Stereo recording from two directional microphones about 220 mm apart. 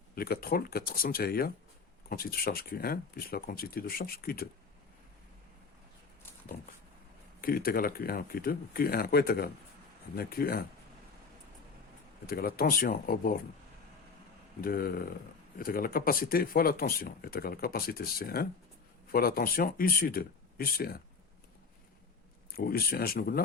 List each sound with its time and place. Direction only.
0.2 s speech: 45° left (ahead or behind)
7.4 s speech: 40° left (ahead or behind)
12.2 s speech: 40° left (ahead or behind)
14.6 s speech: 40° left (ahead or behind)
22.5 s speech: 40° left (ahead or behind)